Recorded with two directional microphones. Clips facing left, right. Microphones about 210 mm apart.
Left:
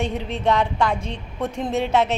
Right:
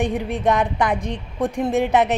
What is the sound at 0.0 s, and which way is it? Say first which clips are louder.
A woman's voice: right 3 dB; 15° right (ahead or behind).